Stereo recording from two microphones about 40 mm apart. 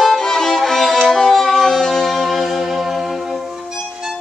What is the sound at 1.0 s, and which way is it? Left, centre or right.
Music, centre.